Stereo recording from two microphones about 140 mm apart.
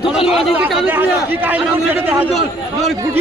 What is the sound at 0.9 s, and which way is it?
A man's voice, 15° right (ahead or behind).